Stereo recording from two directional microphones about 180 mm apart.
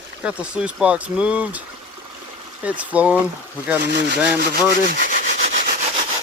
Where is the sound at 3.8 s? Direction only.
65° right (ahead or behind).